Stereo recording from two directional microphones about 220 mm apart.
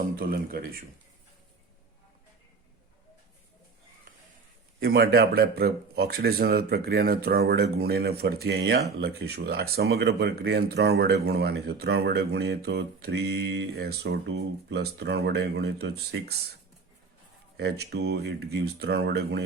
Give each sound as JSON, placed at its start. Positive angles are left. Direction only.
{"t": 0.0, "sound": "a man's voice", "side_deg": -40}
{"t": 4.8, "sound": "speech", "side_deg": -45}
{"t": 17.6, "sound": "speech", "side_deg": -45}